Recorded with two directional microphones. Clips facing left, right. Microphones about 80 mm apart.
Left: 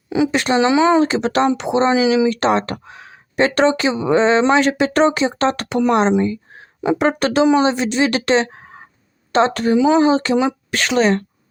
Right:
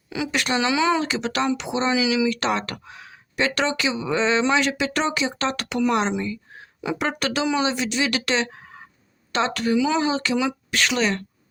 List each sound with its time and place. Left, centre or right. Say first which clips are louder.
0.1 s speech: left 8 dB; left